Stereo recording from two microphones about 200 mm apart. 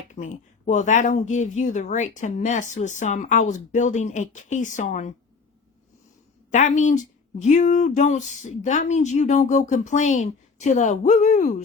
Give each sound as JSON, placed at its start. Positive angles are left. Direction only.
{"t": 0.1, "sound": "speech", "side_deg": 40}
{"t": 6.5, "sound": "speech", "side_deg": 40}